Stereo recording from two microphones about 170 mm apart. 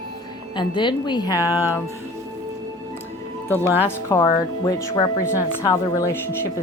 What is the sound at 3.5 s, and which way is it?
A woman's voice, 15° left (ahead or behind).